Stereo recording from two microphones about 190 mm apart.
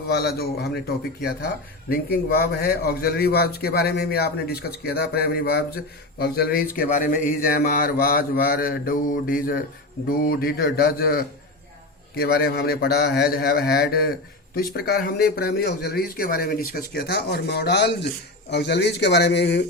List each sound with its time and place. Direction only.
0.1 s a man's voice: 55° left (ahead or behind)